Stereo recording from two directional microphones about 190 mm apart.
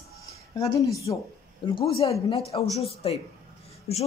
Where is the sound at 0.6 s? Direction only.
15° left (ahead or behind).